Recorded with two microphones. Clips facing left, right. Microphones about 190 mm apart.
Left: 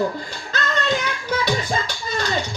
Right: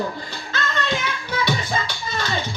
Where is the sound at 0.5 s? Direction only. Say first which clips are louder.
Left 3 dB; 45° left (ahead or behind).